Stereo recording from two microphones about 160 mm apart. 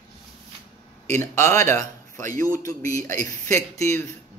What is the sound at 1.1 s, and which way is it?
A man's voice, 15° left (ahead or behind).